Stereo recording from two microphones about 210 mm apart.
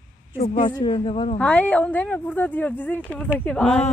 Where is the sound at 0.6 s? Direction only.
20° left (ahead or behind).